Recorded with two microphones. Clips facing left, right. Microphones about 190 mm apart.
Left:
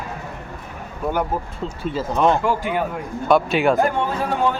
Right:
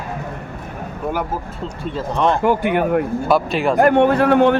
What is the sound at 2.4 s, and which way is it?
Speech, 60° right (ahead or behind).